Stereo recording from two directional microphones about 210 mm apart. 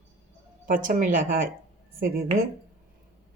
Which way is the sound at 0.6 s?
40° right (ahead or behind).